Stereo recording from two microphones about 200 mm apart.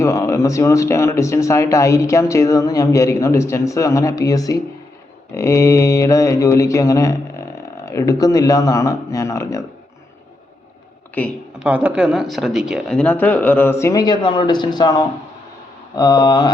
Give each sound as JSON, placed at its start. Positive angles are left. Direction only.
{"t": 0.0, "sound": "speech", "side_deg": 15}
{"t": 11.2, "sound": "speech", "side_deg": 10}
{"t": 11.6, "sound": "speech", "side_deg": -5}